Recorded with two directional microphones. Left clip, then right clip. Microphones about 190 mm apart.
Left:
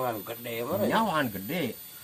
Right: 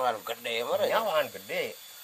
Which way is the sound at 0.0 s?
60° right (ahead or behind).